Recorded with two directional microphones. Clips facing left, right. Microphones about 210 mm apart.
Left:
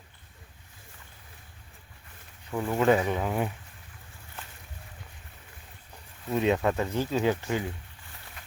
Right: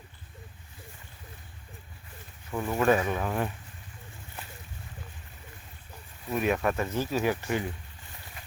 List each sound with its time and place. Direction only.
2.6 s speech: 20° left (ahead or behind)
6.3 s speech: 25° left (ahead or behind)